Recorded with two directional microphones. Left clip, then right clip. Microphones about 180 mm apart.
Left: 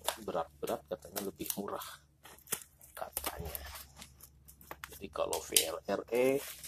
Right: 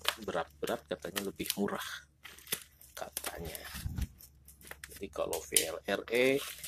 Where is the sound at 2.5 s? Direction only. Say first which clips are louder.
Right 3 dB; 20° right (ahead or behind).